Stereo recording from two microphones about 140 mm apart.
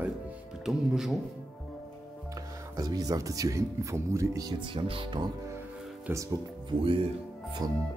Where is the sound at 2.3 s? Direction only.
25° right (ahead or behind).